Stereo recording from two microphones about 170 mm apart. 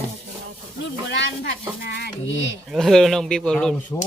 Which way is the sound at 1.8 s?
80° left.